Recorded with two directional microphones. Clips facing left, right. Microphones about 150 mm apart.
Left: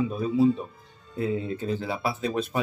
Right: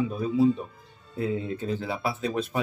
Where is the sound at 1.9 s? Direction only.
30° left (ahead or behind).